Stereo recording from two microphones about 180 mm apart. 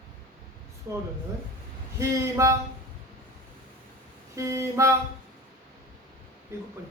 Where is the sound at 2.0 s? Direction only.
15° right (ahead or behind).